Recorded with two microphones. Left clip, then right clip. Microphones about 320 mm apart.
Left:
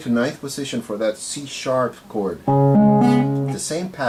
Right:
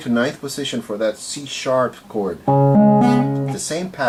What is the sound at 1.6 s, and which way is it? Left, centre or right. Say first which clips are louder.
Speech: right 2 dB; centre.